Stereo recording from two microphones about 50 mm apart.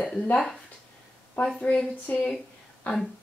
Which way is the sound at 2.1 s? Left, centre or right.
Left.